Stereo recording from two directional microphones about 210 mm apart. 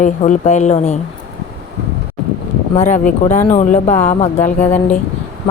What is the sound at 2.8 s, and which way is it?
Speech, 35° left (ahead or behind).